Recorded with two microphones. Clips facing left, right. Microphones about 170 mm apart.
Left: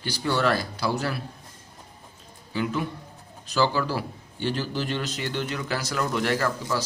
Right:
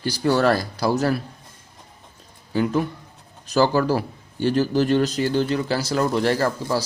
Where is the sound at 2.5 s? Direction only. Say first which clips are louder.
Right 6 dB; 45° right (ahead or behind).